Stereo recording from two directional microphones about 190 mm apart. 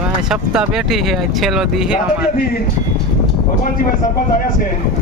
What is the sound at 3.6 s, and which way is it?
Speech, 45° left (ahead or behind).